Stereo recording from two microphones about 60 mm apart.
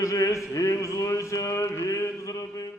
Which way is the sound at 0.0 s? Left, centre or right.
Left.